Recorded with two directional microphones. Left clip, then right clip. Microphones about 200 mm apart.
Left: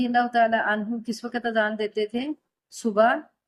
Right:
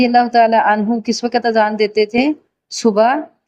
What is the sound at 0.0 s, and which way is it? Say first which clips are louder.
Speech: right 10 dB; 20° right (ahead or behind).